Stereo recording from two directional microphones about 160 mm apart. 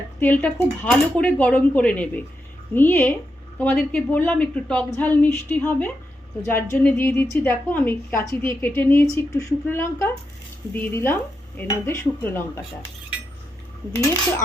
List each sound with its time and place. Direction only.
0.2 s a woman's voice: 10° left (ahead or behind)